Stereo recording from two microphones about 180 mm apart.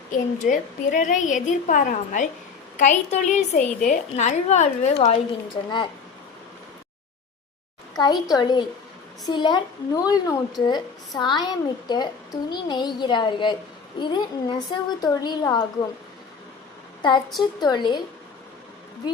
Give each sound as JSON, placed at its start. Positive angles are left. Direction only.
{"t": 0.1, "sound": "a woman's voice", "side_deg": 45}
{"t": 7.9, "sound": "a woman's voice", "side_deg": 20}
{"t": 17.0, "sound": "a woman's voice", "side_deg": 25}